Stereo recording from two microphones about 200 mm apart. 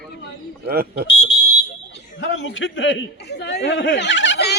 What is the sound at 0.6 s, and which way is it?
Speech, 50° right (ahead or behind).